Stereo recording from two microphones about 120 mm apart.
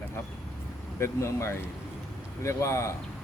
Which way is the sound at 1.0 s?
25° left (ahead or behind).